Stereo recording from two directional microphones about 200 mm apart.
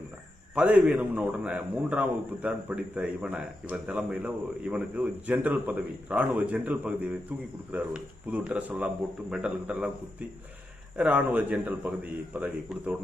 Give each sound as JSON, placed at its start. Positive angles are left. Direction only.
{"t": 0.5, "sound": "a man's voice", "side_deg": -5}